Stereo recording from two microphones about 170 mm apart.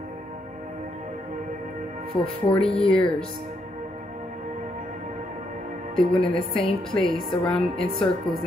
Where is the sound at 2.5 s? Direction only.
5° left (ahead or behind).